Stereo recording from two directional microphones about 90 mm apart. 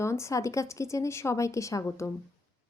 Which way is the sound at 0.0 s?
30° left (ahead or behind).